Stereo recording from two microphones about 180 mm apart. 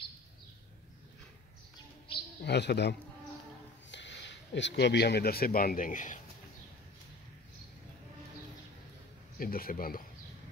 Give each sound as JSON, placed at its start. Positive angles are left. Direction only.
{"t": 2.4, "sound": "a man's voice", "side_deg": 65}
{"t": 3.9, "sound": "speech", "side_deg": 85}
{"t": 9.4, "sound": "speech", "side_deg": 55}